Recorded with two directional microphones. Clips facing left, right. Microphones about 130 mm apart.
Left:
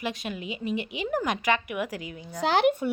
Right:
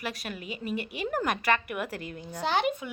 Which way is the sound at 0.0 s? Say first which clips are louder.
Left 4 dB; 20° left (ahead or behind).